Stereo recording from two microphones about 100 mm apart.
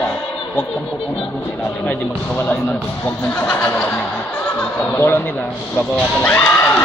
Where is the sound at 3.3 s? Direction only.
20° left (ahead or behind).